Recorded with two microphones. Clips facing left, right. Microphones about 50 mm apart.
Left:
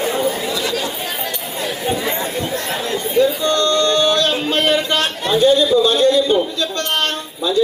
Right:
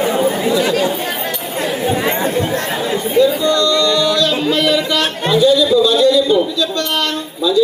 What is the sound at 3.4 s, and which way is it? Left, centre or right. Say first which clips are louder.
Music: right 2 dB; left.